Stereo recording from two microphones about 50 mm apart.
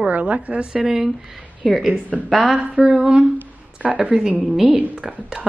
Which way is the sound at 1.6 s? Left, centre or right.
Centre.